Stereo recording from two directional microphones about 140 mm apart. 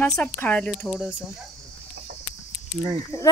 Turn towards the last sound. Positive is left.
turn(degrees=20)  # may be behind; listen again after turning